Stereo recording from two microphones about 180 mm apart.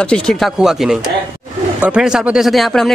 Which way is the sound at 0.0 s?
5° left (ahead or behind).